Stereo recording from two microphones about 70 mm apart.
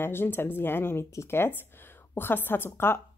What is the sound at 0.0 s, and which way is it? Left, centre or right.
A woman's voice, left.